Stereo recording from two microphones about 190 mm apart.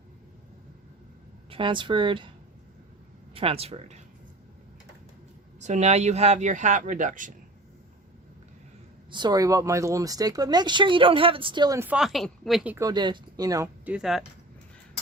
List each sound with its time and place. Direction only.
1.5 s speech: 25° right (ahead or behind)
3.3 s speech: 30° right (ahead or behind)
5.5 s speech: 40° right (ahead or behind)
9.1 s speech: 20° right (ahead or behind); by 12.7 s centre (ahead or behind)
12.7 s speech: 20° right (ahead or behind)
13.8 s speech: 5° right (ahead or behind)